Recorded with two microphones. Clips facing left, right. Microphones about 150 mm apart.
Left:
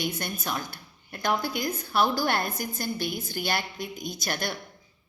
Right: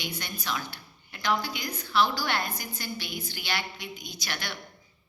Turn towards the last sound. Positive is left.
turn(degrees=45)  # may be behind; listen again after turning